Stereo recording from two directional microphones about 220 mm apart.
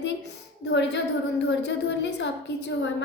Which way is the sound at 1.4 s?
50° left (ahead or behind).